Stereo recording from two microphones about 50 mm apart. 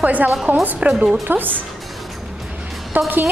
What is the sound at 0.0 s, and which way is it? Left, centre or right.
Speech, right.